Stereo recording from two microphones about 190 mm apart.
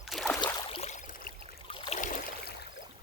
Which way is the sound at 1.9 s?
45° left (ahead or behind).